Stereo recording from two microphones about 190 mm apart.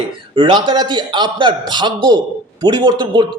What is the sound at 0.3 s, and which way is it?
A man's voice, 25° right (ahead or behind).